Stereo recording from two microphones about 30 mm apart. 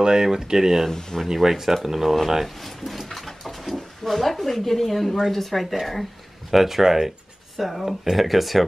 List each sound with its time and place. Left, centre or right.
0.0 s speech: right
0.8 s speech: centre
1.3 s speech: centre
2.4 s speech: centre
3.1 s a sound: centre
5.3 s speech: centre
6.5 s speech: centre